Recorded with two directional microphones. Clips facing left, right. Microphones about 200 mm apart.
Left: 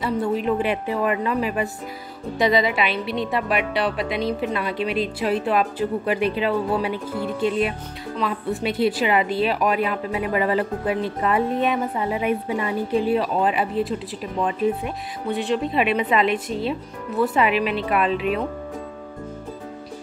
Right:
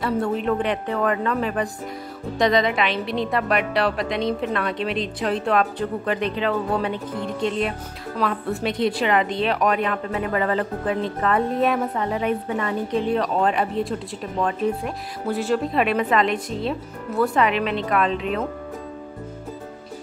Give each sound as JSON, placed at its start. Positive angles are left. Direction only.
{"t": 0.0, "sound": "a woman's voice", "side_deg": 0}